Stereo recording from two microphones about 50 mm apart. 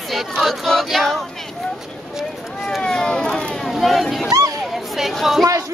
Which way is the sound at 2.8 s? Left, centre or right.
Centre.